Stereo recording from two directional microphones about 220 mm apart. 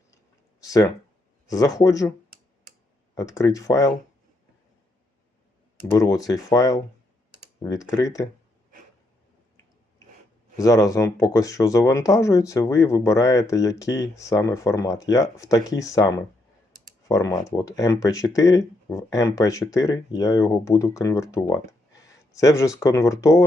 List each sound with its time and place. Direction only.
0.6 s a sound: 15° left (ahead or behind)
1.5 s speech: 15° left (ahead or behind)
3.2 s speech: 15° left (ahead or behind)
6.0 s speech: 15° left (ahead or behind)
10.6 s speech: 15° left (ahead or behind)